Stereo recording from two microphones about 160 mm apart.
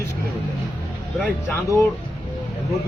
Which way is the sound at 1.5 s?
20° left (ahead or behind).